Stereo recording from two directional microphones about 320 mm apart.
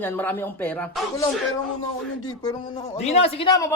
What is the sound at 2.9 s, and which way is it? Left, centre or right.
Speech, centre.